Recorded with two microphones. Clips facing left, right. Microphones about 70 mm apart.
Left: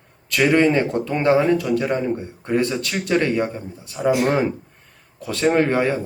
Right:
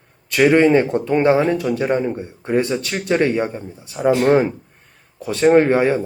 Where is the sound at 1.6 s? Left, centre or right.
Right; by 4.5 s centre.